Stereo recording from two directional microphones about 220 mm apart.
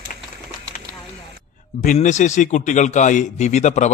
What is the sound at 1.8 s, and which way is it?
A man's voice, 35° left (ahead or behind).